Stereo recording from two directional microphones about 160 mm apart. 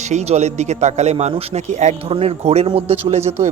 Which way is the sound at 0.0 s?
45° right (ahead or behind).